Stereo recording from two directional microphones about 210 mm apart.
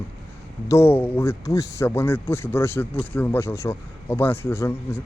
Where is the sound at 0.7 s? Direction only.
10° left (ahead or behind).